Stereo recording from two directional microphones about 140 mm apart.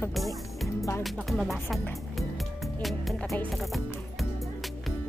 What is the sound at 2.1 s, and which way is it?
Music, centre (ahead or behind).